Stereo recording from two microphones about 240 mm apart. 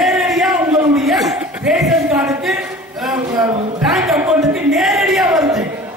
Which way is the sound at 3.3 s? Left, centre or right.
Centre.